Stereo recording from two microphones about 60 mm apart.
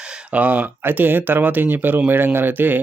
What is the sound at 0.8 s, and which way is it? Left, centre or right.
Speech, right.